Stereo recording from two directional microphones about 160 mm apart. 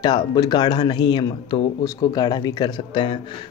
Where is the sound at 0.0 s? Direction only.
25° left (ahead or behind).